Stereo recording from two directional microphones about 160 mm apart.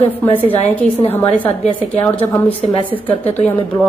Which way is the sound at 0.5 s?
10° left (ahead or behind).